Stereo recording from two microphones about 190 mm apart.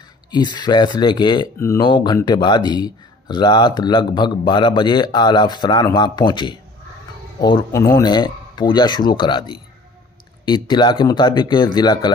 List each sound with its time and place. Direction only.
0.3 s speech: 20° left (ahead or behind)